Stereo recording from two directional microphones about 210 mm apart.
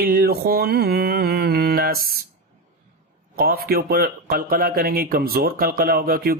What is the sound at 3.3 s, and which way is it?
Speech, 45° right (ahead or behind).